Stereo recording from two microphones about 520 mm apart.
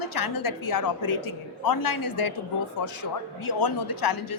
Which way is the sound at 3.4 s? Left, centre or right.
Left.